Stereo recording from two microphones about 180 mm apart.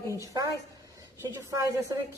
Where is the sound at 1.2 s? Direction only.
15° right (ahead or behind).